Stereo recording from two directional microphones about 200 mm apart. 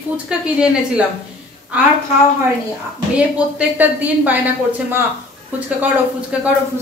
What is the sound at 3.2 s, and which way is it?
Speech, 5° right (ahead or behind).